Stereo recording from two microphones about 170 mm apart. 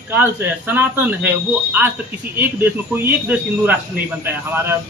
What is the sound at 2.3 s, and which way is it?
Speech, 10° right (ahead or behind).